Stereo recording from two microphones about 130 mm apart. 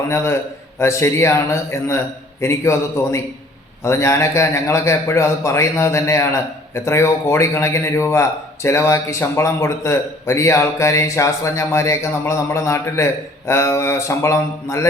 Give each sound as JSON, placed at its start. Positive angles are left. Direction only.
{"t": 0.8, "sound": "a man's voice", "side_deg": 20}